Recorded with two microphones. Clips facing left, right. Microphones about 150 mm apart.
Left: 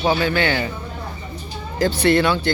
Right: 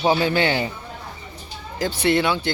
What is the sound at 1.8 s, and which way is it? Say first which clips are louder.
Speech: left 3 dB; 15° right (ahead or behind).